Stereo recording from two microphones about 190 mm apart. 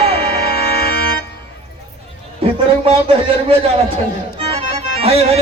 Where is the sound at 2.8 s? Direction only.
30° right (ahead or behind).